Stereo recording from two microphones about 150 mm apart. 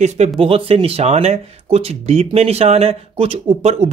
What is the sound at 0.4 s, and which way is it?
Speech, 40° right (ahead or behind).